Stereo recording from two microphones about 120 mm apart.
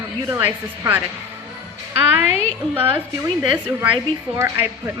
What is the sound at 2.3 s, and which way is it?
Speech, 60° left (ahead or behind).